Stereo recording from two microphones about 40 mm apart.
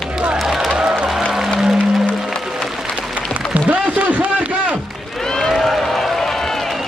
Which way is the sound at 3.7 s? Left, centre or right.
Right.